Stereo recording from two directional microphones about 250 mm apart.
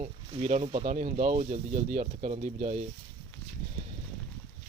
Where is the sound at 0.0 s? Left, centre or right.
Right.